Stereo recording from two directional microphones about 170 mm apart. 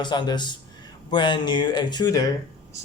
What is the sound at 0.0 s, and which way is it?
A man's voice, 25° left (ahead or behind).